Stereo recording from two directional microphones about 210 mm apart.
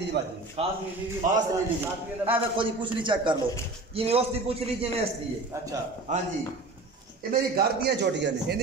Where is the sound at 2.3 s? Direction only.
25° right (ahead or behind).